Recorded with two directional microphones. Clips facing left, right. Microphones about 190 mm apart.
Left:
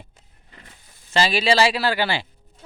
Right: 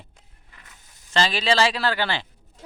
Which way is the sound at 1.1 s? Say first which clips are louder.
Left 3 dB; 10° left (ahead or behind).